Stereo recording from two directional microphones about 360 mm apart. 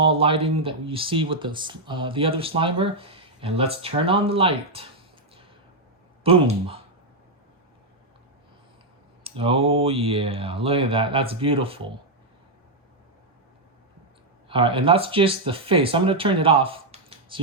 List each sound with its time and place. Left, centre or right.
0.0 s speech: centre
6.2 s speech: centre
9.2 s speech: centre
14.5 s speech: centre